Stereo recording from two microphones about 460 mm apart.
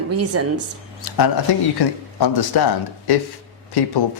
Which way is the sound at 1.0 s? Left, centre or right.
Left.